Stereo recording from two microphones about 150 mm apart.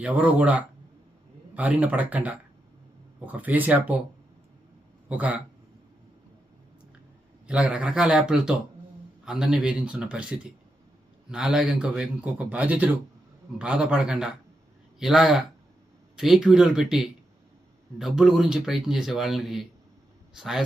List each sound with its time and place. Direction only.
0.0 s speech: 10° right (ahead or behind)
5.0 s a man's voice: 10° right (ahead or behind)
7.4 s a man's voice: 10° right (ahead or behind)